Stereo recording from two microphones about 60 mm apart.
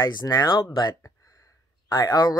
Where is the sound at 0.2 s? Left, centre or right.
Left.